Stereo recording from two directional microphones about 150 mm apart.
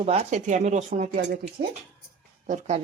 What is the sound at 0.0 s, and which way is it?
Speech, 45° right (ahead or behind).